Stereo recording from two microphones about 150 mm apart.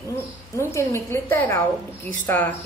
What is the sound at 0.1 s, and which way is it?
A woman's voice, 20° left (ahead or behind).